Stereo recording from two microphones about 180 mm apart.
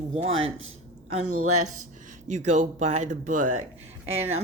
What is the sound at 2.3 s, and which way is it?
Speech, 40° right (ahead or behind).